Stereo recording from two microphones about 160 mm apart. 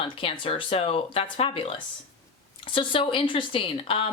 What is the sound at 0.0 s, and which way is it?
Speech, 35° left (ahead or behind).